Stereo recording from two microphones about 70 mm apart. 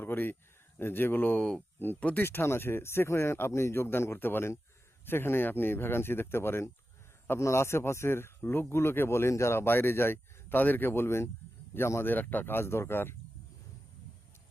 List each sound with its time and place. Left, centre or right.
0.0 s speech: left
2.2 s speech: left
12.1 s speech: left